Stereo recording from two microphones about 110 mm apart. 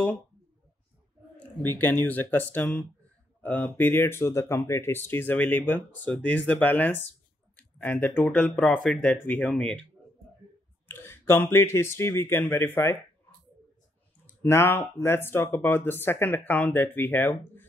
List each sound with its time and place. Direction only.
1.6 s speech: 20° left (ahead or behind)
7.5 s a sound: 15° left (ahead or behind)
8.5 s speech: 10° left (ahead or behind)
10.9 s speech: 20° left (ahead or behind)
14.2 s speech: 20° left (ahead or behind)